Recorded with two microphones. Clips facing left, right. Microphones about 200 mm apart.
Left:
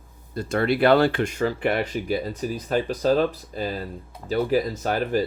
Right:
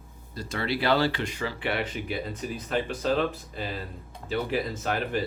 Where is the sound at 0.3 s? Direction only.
50° left (ahead or behind).